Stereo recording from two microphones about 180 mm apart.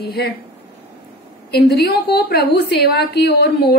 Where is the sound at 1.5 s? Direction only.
65° left (ahead or behind).